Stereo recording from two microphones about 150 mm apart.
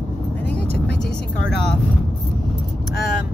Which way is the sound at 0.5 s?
10° left (ahead or behind).